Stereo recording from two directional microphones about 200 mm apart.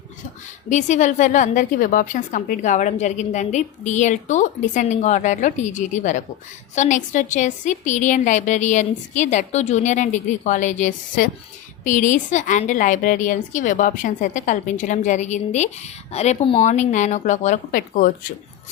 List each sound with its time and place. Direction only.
0.7 s a woman's voice: 35° left (ahead or behind)